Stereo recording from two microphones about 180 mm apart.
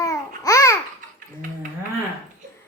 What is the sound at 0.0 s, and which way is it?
Babbling, 20° left (ahead or behind).